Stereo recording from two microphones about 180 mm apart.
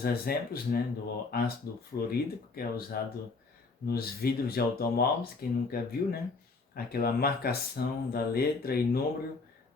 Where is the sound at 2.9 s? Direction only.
60° left (ahead or behind).